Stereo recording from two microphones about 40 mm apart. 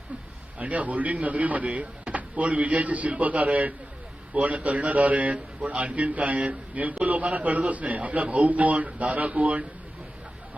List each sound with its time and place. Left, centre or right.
0.6 s speech: right